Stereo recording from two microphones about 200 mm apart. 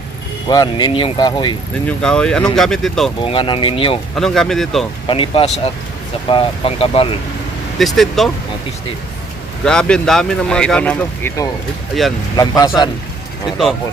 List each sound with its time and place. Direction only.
0.4 s speech: 20° left (ahead or behind)
1.9 s speech: 5° left (ahead or behind)
3.2 s speech: 25° left (ahead or behind)
4.1 s speech: centre (ahead or behind)
5.0 s speech: 25° left (ahead or behind)
7.8 s speech: centre (ahead or behind)
9.6 s speech: 5° left (ahead or behind)